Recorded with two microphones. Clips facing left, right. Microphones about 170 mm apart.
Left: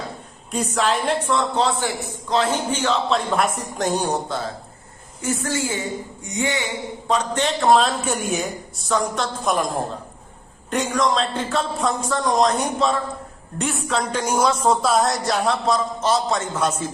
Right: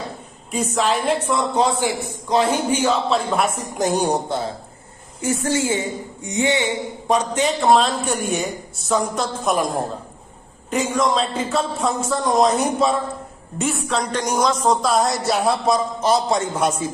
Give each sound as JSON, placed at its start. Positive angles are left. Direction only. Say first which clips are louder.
{"t": 0.5, "sound": "speech", "louder": "right 1 dB", "side_deg": 0}
{"t": 1.5, "sound": "a woman's voice", "louder": "right 2 dB", "side_deg": -15}
{"t": 7.1, "sound": "a woman's voice", "louder": "right 2 dB", "side_deg": -5}